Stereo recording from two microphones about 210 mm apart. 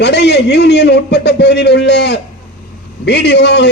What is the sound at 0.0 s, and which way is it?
A man's voice, 55° left (ahead or behind).